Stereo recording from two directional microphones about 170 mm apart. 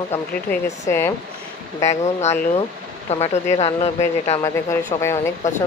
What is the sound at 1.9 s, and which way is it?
Speech, 40° left (ahead or behind).